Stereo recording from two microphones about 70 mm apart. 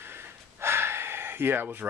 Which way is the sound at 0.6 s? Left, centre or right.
Right.